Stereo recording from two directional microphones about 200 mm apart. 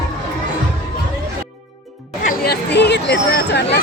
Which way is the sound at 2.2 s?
50° left (ahead or behind).